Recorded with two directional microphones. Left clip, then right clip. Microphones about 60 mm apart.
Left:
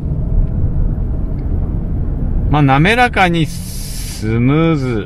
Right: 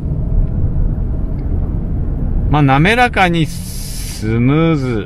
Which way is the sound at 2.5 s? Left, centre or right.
Right.